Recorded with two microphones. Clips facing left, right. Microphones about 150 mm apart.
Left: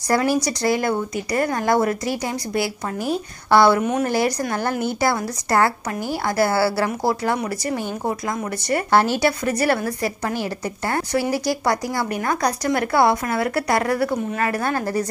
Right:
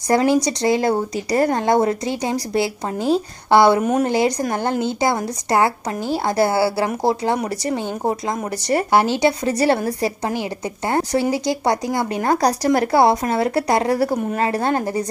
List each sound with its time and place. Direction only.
0.1 s a woman's voice: 20° right (ahead or behind)
7.4 s speech: 30° right (ahead or behind)
8.9 s a woman's voice: 20° right (ahead or behind)